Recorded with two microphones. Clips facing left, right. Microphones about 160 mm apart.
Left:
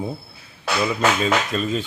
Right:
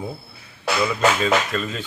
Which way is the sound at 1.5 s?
20° left (ahead or behind).